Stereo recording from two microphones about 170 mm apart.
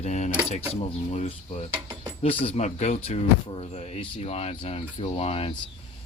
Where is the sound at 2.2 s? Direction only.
35° left (ahead or behind).